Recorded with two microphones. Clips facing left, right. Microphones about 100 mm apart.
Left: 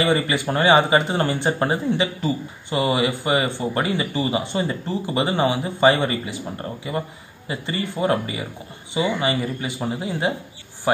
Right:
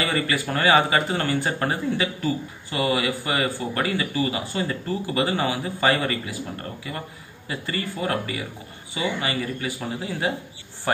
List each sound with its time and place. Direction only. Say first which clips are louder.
0.0 s speech: left 4 dB; 20° left (ahead or behind)